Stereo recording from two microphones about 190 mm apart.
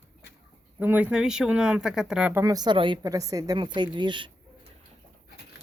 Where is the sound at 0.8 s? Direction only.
10° right (ahead or behind).